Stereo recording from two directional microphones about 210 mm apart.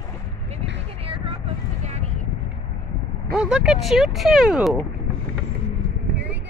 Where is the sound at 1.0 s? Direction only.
25° right (ahead or behind).